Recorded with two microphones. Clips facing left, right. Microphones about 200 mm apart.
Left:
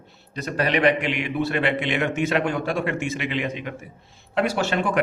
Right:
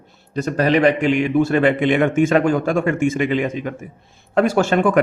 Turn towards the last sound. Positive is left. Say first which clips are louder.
# right 7 dB
turn(degrees=-50)  # may be behind; listen again after turning